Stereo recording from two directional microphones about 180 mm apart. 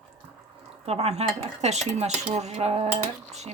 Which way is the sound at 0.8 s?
35° right (ahead or behind).